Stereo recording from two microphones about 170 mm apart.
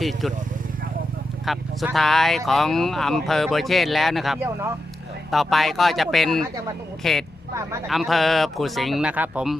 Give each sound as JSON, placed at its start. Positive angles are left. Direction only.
{"t": 0.0, "sound": "speech", "side_deg": 0}
{"t": 1.5, "sound": "speech", "side_deg": 0}
{"t": 4.4, "sound": "speech", "side_deg": -15}
{"t": 5.3, "sound": "speech", "side_deg": 0}
{"t": 7.5, "sound": "speech", "side_deg": -15}
{"t": 7.9, "sound": "speech", "side_deg": 0}